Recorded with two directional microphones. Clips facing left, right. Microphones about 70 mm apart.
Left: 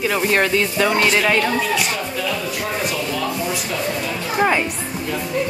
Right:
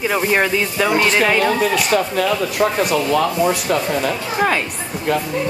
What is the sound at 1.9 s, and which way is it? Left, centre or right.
Speech, right.